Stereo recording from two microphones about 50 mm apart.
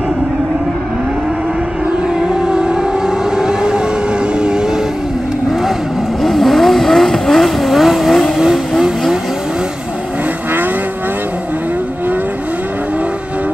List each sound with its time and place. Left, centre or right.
2.2 s civil defense siren: centre
3.3 s vehicle: centre
6.2 s vehicle: centre
7.7 s vehicle: centre